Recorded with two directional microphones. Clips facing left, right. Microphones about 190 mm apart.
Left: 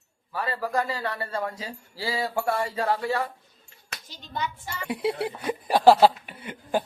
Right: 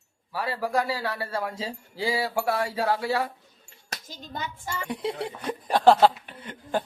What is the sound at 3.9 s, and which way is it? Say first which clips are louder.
Hands: left 1 dB; 45° right (ahead or behind).